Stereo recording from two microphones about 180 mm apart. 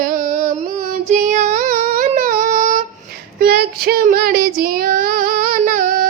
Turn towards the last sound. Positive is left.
turn(degrees=-50)  # may be behind; listen again after turning